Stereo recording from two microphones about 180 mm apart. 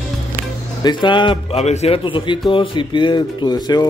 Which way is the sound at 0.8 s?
25° left (ahead or behind).